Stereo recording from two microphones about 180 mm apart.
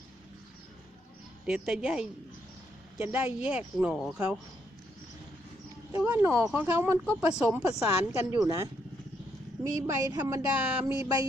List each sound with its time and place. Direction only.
1.5 s a woman's voice: centre (ahead or behind)
5.9 s speech: 10° right (ahead or behind)